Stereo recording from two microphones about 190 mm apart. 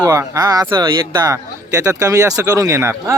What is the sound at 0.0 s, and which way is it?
Speech, 15° right (ahead or behind).